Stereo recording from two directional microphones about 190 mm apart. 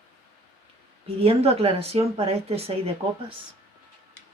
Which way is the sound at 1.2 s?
30° right (ahead or behind).